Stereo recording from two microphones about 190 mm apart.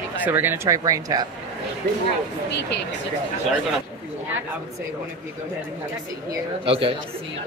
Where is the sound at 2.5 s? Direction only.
65° left (ahead or behind).